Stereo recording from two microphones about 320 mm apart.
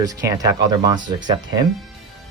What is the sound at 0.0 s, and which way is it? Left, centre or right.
Speech, centre.